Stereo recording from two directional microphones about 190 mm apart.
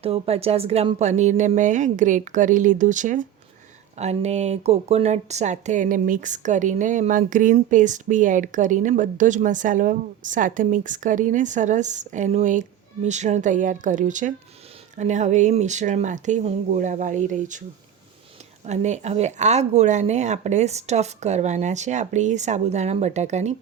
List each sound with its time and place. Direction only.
0.0 s speech: 30° right (ahead or behind)
18.6 s speech: 35° right (ahead or behind)